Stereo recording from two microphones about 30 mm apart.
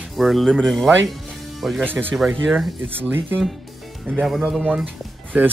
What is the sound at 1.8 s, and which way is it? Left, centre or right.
Speech, right.